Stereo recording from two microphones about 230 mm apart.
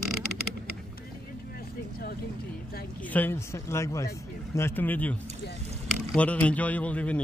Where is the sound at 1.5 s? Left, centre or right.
Left.